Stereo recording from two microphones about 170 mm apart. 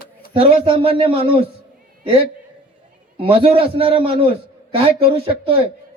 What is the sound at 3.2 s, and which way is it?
Speech, 35° right (ahead or behind).